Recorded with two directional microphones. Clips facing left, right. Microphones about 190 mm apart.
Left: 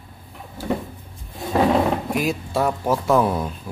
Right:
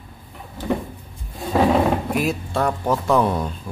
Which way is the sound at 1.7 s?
Centre (ahead or behind).